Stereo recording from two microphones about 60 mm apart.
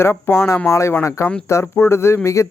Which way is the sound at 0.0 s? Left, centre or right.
Left.